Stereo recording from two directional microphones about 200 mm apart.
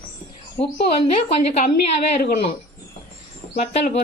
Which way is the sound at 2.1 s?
35° left (ahead or behind).